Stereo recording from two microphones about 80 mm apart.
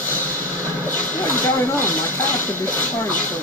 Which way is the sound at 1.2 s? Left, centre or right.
Left.